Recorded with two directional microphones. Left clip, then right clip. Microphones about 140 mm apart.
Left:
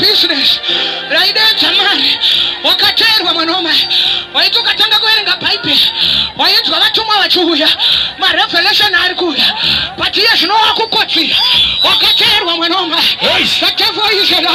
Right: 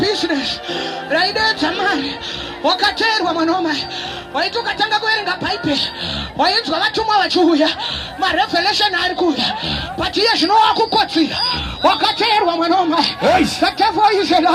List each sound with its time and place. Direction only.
0.0 s music: 40° right (ahead or behind); by 3.2 s 60° right (ahead or behind)
3.2 s a woman's voice: 55° right (ahead or behind); by 11.7 s 70° right (ahead or behind)